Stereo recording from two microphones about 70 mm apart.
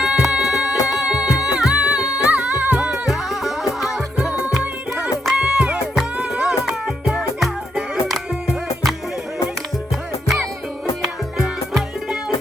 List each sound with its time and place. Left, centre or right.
0.2 s music: centre
3.1 s music: centre
4.4 s music: centre
11.0 s music: centre